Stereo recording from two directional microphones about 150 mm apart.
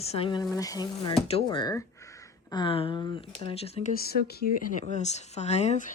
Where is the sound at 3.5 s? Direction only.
40° left (ahead or behind).